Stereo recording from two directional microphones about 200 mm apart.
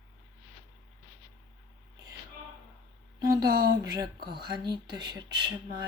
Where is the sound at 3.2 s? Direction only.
50° right (ahead or behind).